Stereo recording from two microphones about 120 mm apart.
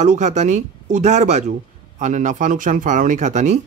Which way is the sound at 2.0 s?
90° right.